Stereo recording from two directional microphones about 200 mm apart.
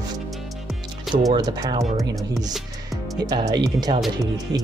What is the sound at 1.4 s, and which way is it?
Speech, 20° right (ahead or behind).